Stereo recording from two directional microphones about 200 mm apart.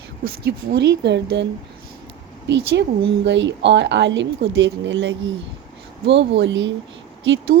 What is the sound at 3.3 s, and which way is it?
A woman's voice, 65° right (ahead or behind).